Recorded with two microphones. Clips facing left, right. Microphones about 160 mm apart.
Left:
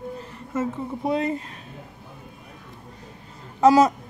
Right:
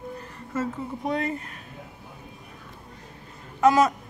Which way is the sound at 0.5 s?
25° left (ahead or behind).